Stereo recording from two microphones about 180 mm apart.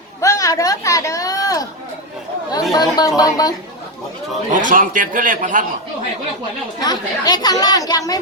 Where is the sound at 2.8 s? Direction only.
20° left (ahead or behind).